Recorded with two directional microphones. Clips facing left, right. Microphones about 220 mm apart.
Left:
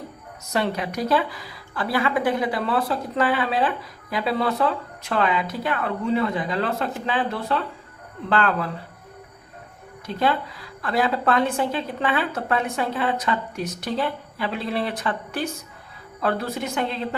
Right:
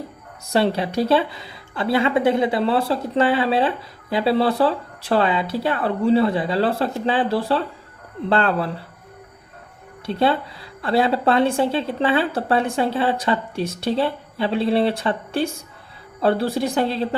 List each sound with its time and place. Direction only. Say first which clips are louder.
0.5 s a woman's voice: right 5 dB; 30° right (ahead or behind)
10.1 s a woman's voice: right 3 dB; 30° right (ahead or behind)